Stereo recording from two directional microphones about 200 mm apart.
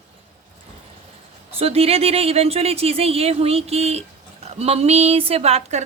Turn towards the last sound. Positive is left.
turn(degrees=-30)  # may be behind; listen again after turning